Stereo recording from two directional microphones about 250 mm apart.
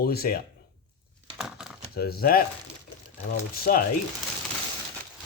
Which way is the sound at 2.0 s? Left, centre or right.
Left.